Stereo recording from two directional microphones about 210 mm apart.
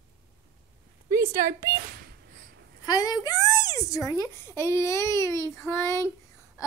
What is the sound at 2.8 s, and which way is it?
A woman's voice, 20° left (ahead or behind).